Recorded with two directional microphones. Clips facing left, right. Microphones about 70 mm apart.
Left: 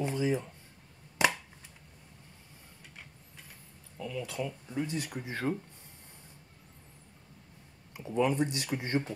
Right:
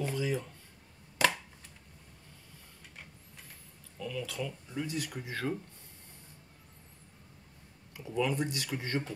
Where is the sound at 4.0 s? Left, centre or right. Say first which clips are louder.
Left 1 dB; left.